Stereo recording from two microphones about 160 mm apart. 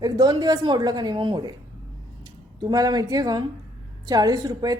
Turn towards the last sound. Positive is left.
turn(degrees=-25)  # may be behind; listen again after turning